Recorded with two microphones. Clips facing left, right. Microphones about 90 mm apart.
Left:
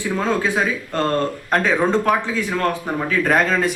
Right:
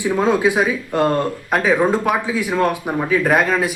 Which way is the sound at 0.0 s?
15° right (ahead or behind).